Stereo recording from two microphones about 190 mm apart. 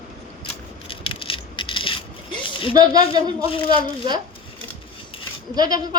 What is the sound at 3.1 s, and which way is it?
Speech, 30° left (ahead or behind).